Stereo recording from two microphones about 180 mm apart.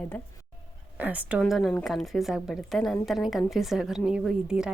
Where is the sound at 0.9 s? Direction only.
10° right (ahead or behind).